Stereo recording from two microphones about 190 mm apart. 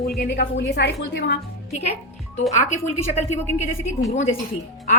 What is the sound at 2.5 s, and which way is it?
Speech, 40° left (ahead or behind).